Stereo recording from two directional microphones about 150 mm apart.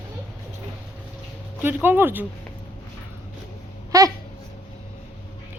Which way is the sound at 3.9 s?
25° right (ahead or behind).